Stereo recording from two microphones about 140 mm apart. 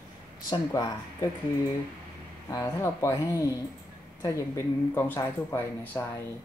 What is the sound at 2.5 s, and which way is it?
Speech, 25° left (ahead or behind).